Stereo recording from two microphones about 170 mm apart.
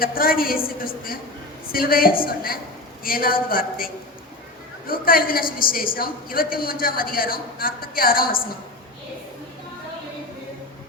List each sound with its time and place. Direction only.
0.0 s a woman's voice: 60° left (ahead or behind)